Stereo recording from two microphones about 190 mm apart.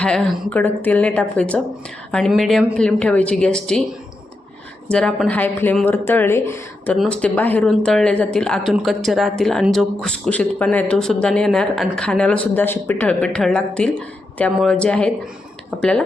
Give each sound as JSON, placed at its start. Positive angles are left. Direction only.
{"t": 0.0, "sound": "speech", "side_deg": 5}
{"t": 4.9, "sound": "speech", "side_deg": 5}